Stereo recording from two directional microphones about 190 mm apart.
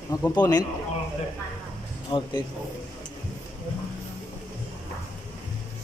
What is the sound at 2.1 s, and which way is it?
Speech, 25° left (ahead or behind).